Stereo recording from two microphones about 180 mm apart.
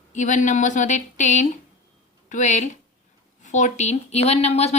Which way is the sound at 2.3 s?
40° left (ahead or behind).